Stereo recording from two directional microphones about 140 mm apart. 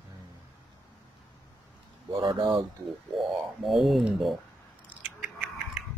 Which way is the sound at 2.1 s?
35° right (ahead or behind).